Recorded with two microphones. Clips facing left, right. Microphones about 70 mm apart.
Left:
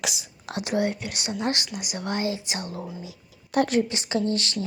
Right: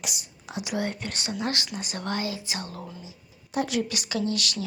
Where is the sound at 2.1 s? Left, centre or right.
Left.